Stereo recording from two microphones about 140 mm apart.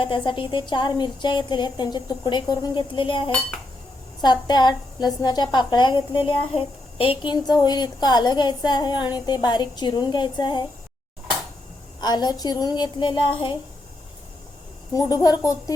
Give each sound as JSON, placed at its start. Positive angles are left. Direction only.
{"t": 0.0, "sound": "a woman's voice", "side_deg": 35}
{"t": 11.9, "sound": "a woman's voice", "side_deg": 30}
{"t": 14.9, "sound": "a woman's voice", "side_deg": 25}